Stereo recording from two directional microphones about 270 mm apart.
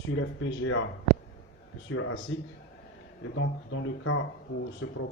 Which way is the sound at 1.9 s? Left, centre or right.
Left.